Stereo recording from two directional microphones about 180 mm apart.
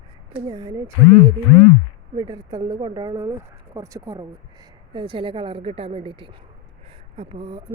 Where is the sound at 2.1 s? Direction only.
20° right (ahead or behind).